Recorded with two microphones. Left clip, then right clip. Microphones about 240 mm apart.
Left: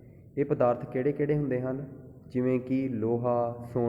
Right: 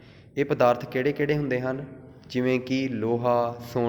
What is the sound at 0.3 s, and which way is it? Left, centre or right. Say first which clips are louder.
Speech: right 4 dB; right.